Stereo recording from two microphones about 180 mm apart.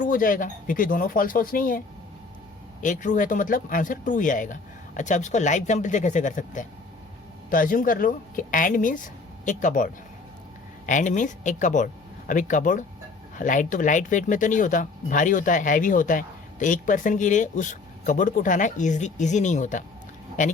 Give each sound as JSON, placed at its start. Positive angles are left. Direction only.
{"t": 0.0, "sound": "speech", "side_deg": 50}
{"t": 2.8, "sound": "speech", "side_deg": 45}